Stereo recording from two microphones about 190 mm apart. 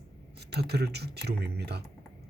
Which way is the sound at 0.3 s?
60° right (ahead or behind).